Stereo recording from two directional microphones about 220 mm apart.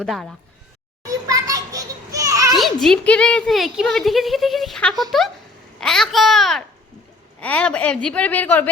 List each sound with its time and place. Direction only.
0.0 s a woman's voice: centre (ahead or behind)
1.3 s children playing: 15° right (ahead or behind)
2.6 s a woman's voice: centre (ahead or behind)